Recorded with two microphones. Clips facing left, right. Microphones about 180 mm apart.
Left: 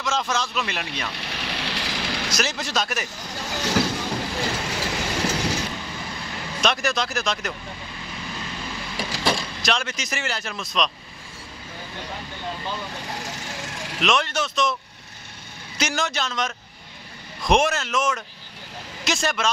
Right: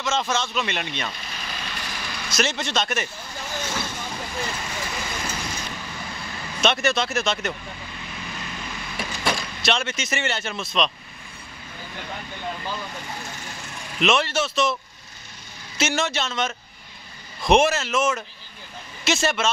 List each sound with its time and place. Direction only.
0.0 s speech: centre (ahead or behind)
1.1 s vehicle: 75° left (ahead or behind)
2.3 s speech: centre (ahead or behind)
3.4 s vehicle: 75° left (ahead or behind)
6.6 s speech: centre (ahead or behind)
9.6 s speech: 5° right (ahead or behind)
13.9 s speech: 5° right (ahead or behind)
15.8 s speech: 5° right (ahead or behind)